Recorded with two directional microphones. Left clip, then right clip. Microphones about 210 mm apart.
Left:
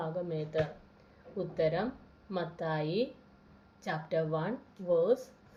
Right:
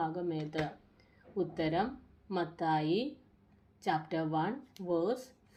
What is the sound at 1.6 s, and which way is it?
A woman's voice, 30° right (ahead or behind).